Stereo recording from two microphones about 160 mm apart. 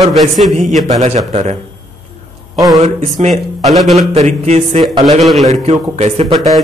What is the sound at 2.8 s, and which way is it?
Speech, 45° right (ahead or behind).